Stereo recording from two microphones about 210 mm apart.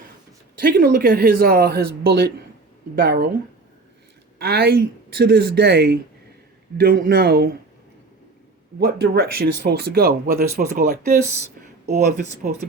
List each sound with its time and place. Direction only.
0.6 s speech: 45° right (ahead or behind)
4.4 s speech: 50° right (ahead or behind)
8.8 s speech: 50° right (ahead or behind)